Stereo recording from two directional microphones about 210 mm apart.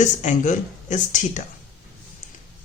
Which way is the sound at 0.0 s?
35° left (ahead or behind).